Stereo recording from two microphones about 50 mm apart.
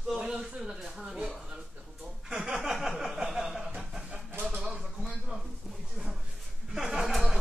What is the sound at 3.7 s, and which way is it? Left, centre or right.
Vehicle, centre.